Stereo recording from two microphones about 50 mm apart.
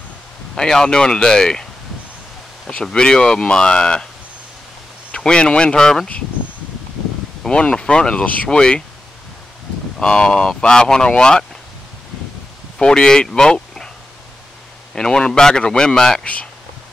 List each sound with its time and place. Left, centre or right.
0.6 s speech: centre
5.1 s speech: centre
7.4 s speech: centre
9.9 s speech: centre
12.7 s speech: centre
15.0 s speech: centre